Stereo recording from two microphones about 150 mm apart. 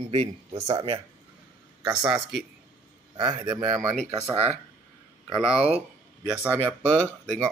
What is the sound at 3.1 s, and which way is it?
Speech, 25° right (ahead or behind).